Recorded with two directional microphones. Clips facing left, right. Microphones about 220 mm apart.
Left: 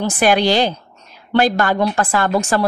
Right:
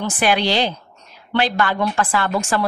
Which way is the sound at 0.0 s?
45° left (ahead or behind).